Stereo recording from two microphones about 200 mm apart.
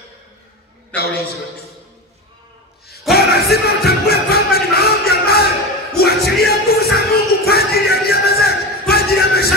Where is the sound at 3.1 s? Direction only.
50° left (ahead or behind).